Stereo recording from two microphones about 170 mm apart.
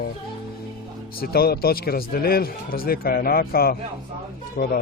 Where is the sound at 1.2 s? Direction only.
65° left (ahead or behind).